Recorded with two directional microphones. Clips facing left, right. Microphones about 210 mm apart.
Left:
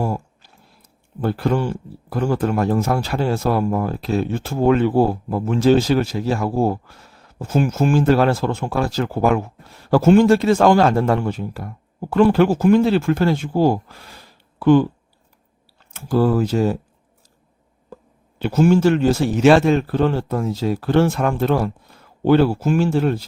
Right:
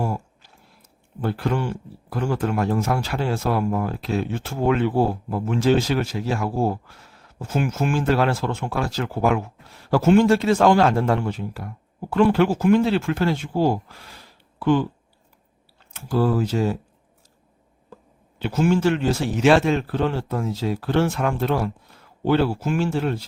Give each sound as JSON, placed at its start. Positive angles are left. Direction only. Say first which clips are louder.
{"t": 1.2, "sound": "speech", "louder": "left 4 dB", "side_deg": 40}
{"t": 15.9, "sound": "speech", "louder": "left 4 dB", "side_deg": 45}
{"t": 18.3, "sound": "speech", "louder": "left 5 dB", "side_deg": 45}